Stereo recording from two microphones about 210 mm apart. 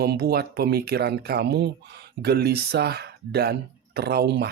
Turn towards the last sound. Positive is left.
turn(degrees=-50)  # may be behind; listen again after turning